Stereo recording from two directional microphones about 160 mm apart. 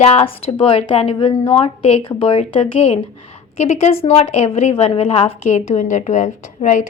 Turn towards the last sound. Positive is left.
turn(degrees=50)  # may be behind; listen again after turning